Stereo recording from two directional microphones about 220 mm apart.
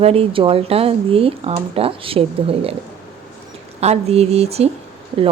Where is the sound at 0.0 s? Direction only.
25° right (ahead or behind).